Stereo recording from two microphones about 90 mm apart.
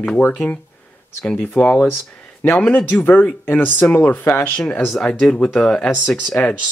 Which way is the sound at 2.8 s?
20° left (ahead or behind).